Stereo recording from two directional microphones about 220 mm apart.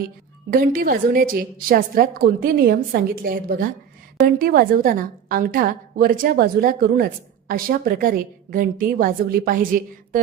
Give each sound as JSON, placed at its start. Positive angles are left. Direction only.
{"t": 0.5, "sound": "a woman's voice", "side_deg": -40}